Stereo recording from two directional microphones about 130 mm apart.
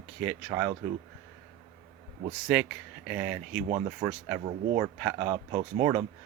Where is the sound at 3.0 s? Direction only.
10° right (ahead or behind).